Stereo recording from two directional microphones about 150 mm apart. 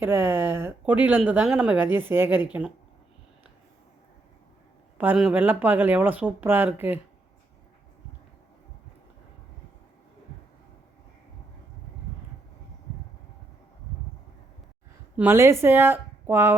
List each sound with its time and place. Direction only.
0.0 s speech: 15° right (ahead or behind)
4.9 s speech: 10° right (ahead or behind)
15.1 s speech: 15° right (ahead or behind)